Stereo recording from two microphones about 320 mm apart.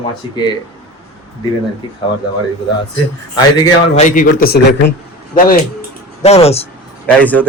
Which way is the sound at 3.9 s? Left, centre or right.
Left.